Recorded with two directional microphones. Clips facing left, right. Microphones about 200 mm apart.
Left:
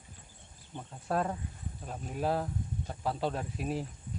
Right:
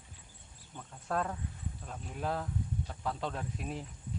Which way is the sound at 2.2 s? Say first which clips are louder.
Left 3 dB; 30° left (ahead or behind).